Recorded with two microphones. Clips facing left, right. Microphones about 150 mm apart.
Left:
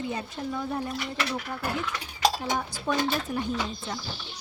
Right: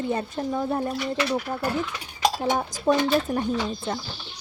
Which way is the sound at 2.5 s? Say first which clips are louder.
Right 6 dB; 40° right (ahead or behind).